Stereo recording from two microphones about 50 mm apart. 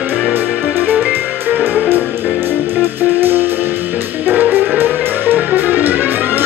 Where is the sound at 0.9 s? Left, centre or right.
Right.